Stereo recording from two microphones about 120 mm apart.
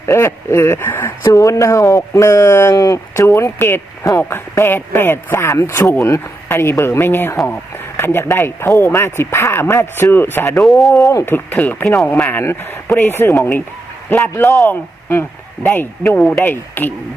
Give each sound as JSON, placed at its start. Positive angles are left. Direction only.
{"t": 0.0, "sound": "speech", "side_deg": 20}
{"t": 10.5, "sound": "speech", "side_deg": 0}
{"t": 11.0, "sound": "speech", "side_deg": 25}